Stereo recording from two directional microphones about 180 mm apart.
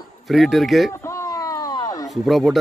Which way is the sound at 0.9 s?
15° left (ahead or behind).